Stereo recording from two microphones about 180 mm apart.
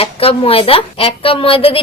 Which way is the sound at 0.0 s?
30° left (ahead or behind).